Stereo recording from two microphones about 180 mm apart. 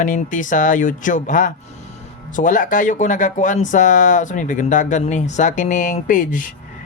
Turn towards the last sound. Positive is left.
turn(degrees=45)  # may be behind; listen again after turning